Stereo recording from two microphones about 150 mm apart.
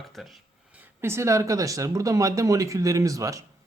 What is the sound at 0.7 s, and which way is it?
Speech, 15° right (ahead or behind).